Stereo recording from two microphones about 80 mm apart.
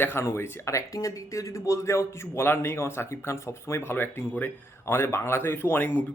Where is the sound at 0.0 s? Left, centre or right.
Left.